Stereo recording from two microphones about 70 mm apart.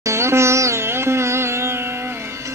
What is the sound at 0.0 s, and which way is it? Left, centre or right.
Sitar, right.